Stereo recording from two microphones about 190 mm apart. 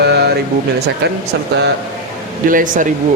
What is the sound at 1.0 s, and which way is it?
Speech, 65° right (ahead or behind).